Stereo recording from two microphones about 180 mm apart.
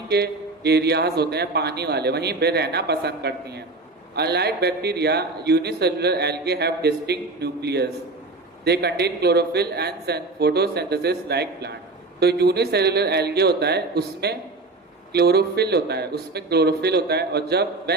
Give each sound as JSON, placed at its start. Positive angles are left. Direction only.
{"t": 0.1, "sound": "a man's voice", "side_deg": -65}